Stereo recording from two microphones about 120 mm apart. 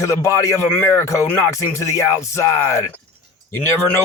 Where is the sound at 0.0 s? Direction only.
25° left (ahead or behind).